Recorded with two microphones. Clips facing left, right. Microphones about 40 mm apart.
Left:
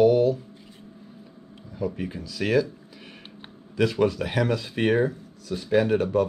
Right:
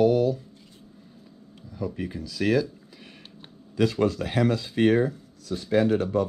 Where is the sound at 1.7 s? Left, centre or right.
Left.